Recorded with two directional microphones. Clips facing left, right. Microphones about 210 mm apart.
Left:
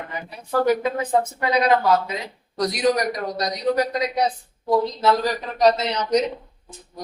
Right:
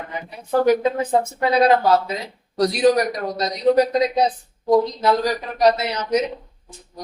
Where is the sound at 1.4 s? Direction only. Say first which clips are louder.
Right 5 dB; 30° right (ahead or behind).